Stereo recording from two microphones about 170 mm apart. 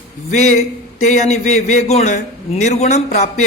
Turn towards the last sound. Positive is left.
turn(degrees=40)  # may be behind; listen again after turning